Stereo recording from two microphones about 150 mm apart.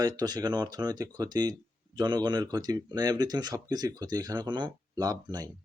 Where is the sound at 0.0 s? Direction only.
25° right (ahead or behind).